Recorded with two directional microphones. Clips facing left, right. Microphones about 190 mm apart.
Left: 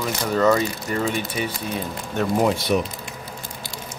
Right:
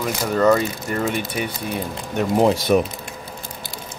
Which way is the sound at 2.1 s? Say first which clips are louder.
Right 3 dB; 20° right (ahead or behind).